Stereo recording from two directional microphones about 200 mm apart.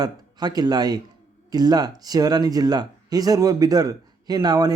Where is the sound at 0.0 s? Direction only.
20° right (ahead or behind).